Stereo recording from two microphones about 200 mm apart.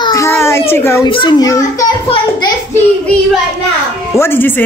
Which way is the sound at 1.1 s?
25° left (ahead or behind).